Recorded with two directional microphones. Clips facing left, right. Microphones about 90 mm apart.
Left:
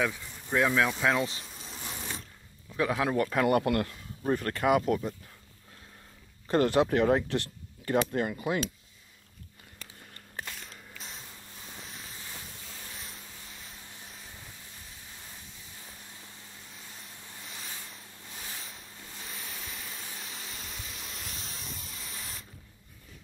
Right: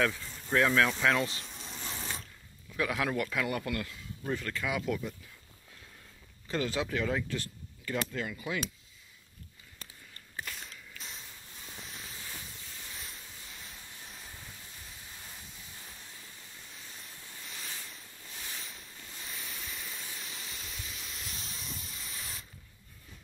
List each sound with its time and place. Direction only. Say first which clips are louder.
0.0 s speech: even; 15° left (ahead or behind)
1.4 s a sound: even; centre (ahead or behind)
2.7 s a man's voice: left 4 dB; 25° left (ahead or behind)
3.4 s speech: left 9 dB; 55° left (ahead or behind)
6.4 s speech: left 8 dB; 55° left (ahead or behind)
7.9 s speech: left 7 dB; 45° left (ahead or behind)
11.8 s waves: even; centre (ahead or behind)
12.9 s a sound: left 1 dB; centre (ahead or behind)
16.7 s a sound: left 1 dB; centre (ahead or behind)